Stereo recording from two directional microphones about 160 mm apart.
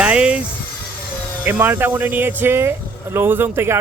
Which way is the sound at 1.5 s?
10° right (ahead or behind).